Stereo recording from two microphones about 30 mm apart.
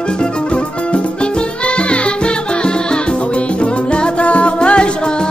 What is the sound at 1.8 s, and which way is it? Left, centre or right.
Music, left.